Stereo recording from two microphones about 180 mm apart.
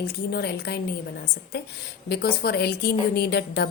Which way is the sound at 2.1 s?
60° left (ahead or behind).